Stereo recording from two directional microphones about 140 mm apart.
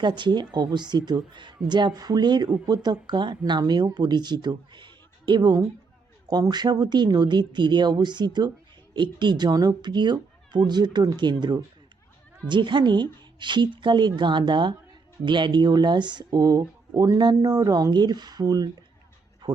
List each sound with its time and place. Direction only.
0.0 s speech: 35° right (ahead or behind)
19.4 s music: 30° right (ahead or behind)